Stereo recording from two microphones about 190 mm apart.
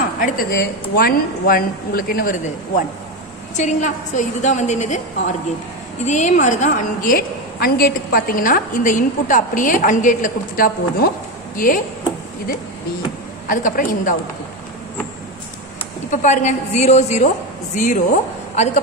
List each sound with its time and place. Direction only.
0.2 s a woman's voice: 50° left (ahead or behind)
6.0 s a woman's voice: 40° left (ahead or behind)
13.5 s a woman's voice: 45° left (ahead or behind)
16.1 s a woman's voice: 40° left (ahead or behind)